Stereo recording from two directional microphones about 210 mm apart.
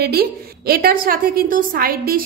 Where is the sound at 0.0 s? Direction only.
50° right (ahead or behind).